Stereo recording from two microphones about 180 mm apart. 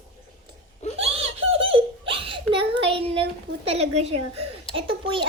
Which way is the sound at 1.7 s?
30° right (ahead or behind).